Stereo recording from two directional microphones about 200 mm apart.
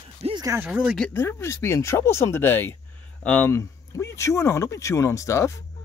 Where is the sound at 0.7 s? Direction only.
5° right (ahead or behind).